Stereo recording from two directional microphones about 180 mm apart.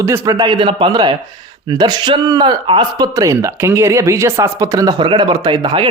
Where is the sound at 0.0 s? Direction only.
15° right (ahead or behind).